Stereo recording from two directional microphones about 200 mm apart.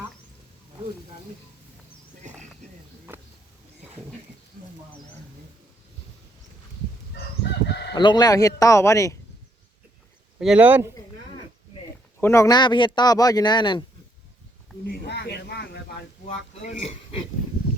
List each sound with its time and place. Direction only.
7.7 s chicken: 55° left (ahead or behind)
7.9 s speech: 20° left (ahead or behind)
10.4 s speech: 5° right (ahead or behind)
12.2 s a man's voice: 15° left (ahead or behind)
14.8 s a sound: 55° left (ahead or behind)
16.6 s speech: 30° left (ahead or behind)